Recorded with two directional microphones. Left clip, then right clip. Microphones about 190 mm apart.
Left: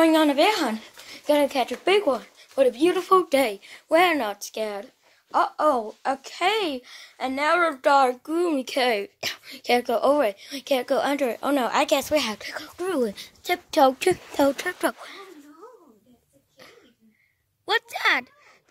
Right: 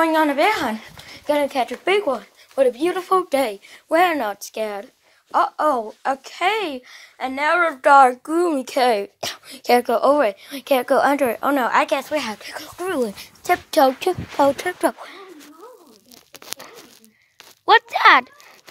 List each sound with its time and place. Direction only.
0.0 s speech: 15° left (ahead or behind)
0.7 s a sound: centre (ahead or behind)
1.3 s speech: 10° left (ahead or behind)
7.8 s a woman's voice: 15° right (ahead or behind)
9.9 s a woman's voice: 5° right (ahead or behind)
11.4 s speech: 5° left (ahead or behind)
11.8 s speech: 20° left (ahead or behind)
12.5 s speech: centre (ahead or behind)
13.9 s speech: 20° left (ahead or behind)
14.7 s speech: centre (ahead or behind)
17.6 s speech: 10° left (ahead or behind)